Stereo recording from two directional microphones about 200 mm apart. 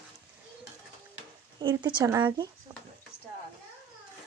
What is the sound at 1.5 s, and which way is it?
Speech, 20° right (ahead or behind).